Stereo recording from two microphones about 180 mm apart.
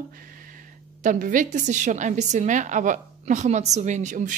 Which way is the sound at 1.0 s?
45° right (ahead or behind).